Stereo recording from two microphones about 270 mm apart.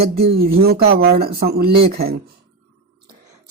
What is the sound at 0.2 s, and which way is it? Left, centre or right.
Speech, right.